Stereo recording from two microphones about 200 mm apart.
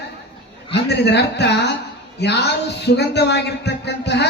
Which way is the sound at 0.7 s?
55° left (ahead or behind).